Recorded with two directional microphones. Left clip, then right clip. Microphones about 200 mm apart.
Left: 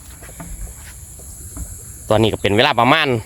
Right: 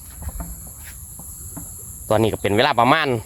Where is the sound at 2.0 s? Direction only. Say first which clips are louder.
Left 3 dB; 15° left (ahead or behind).